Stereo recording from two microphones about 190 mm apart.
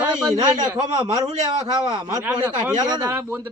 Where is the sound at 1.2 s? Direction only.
35° right (ahead or behind).